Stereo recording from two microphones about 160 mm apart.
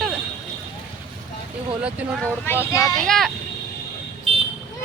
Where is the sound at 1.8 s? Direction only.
10° right (ahead or behind).